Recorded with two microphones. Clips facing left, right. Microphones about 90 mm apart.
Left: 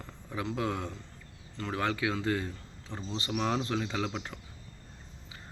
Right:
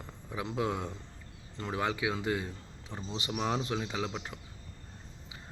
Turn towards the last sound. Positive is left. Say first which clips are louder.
# left 2 dB
turn(degrees=-5)  # may be behind; listen again after turning